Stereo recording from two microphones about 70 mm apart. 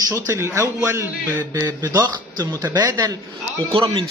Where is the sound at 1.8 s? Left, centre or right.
Right.